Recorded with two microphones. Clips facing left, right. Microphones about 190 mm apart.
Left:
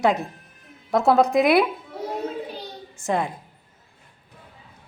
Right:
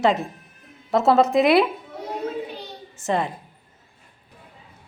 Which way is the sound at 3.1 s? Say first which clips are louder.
Right 1 dB; 10° left (ahead or behind).